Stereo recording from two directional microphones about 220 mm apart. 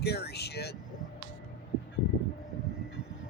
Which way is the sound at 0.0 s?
45° left (ahead or behind).